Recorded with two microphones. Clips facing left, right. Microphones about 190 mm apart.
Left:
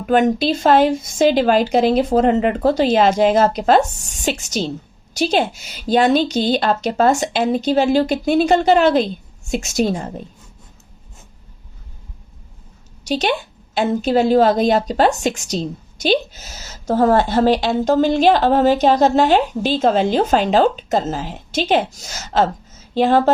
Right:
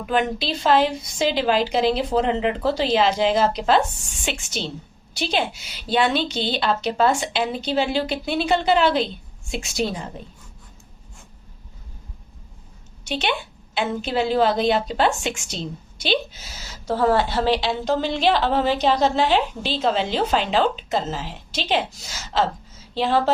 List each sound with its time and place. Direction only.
0.0 s a woman's voice: 45° left (ahead or behind)
13.1 s a woman's voice: 40° left (ahead or behind)